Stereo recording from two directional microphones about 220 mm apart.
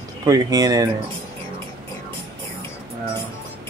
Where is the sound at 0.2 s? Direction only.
15° right (ahead or behind).